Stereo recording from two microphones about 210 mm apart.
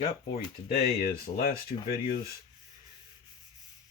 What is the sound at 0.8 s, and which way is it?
Speech, 45° left (ahead or behind).